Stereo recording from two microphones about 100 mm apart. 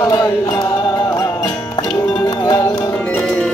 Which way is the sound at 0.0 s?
30° left (ahead or behind).